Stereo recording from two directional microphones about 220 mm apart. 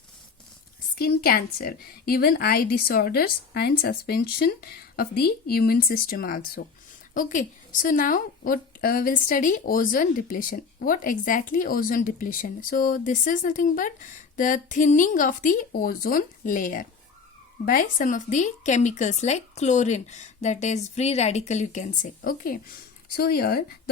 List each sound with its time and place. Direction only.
0.9 s a woman's voice: 45° left (ahead or behind)